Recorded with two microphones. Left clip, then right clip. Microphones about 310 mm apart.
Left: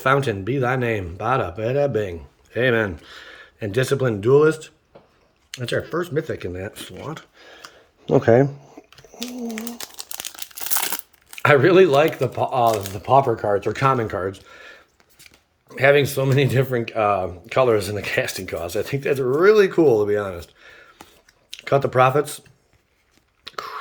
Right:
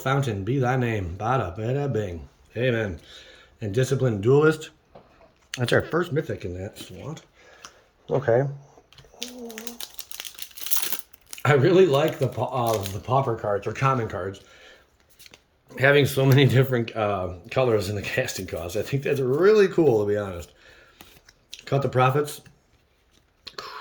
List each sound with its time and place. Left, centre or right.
0.0 s speech: centre
8.2 s speech: left
8.4 s a sound: left
10.2 s crumpling: centre
11.3 s speech: centre
15.7 s speech: centre
23.4 s chewing: centre